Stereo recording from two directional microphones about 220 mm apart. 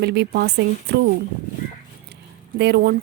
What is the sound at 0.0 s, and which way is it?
Speech, 50° right (ahead or behind).